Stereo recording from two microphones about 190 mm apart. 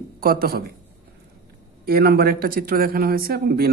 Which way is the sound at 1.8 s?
55° right (ahead or behind).